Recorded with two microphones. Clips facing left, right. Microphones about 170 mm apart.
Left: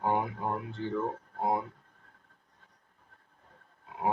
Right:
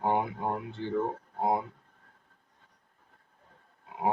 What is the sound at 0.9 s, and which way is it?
Speech, 20° right (ahead or behind).